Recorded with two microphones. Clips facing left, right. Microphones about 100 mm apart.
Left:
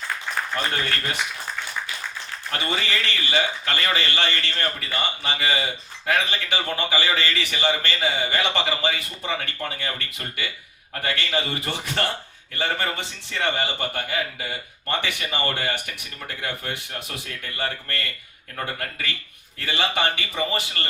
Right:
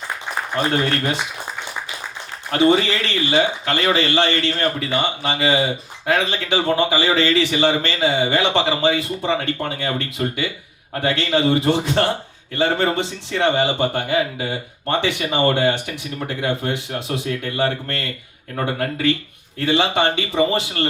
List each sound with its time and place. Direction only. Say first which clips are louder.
0.5 s speech: right 9 dB; 20° right (ahead or behind)